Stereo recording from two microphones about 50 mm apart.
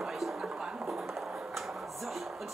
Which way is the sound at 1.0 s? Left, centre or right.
Centre.